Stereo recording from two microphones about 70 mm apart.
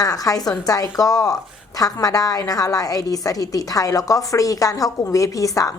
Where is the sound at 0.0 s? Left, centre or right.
Left.